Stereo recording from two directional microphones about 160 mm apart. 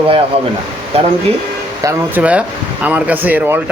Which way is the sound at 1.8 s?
20° right (ahead or behind).